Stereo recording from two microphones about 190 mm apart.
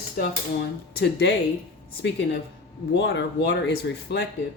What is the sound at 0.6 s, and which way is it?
Speech, 60° left (ahead or behind).